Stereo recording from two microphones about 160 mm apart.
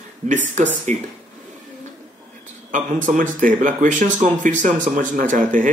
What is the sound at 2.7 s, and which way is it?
Speech, 55° right (ahead or behind).